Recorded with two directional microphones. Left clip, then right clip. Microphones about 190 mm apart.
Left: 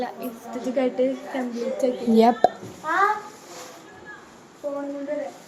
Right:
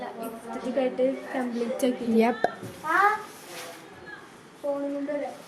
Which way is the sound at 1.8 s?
60° right (ahead or behind).